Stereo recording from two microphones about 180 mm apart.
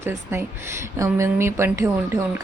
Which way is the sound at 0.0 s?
15° right (ahead or behind).